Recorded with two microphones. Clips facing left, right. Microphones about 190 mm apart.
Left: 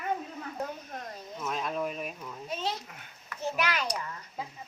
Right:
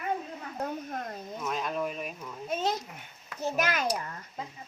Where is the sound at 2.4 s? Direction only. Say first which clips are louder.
Right 5 dB; 45° right (ahead or behind).